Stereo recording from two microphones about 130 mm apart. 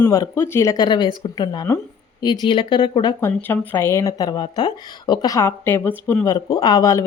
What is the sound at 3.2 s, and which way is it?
Speech, 15° left (ahead or behind).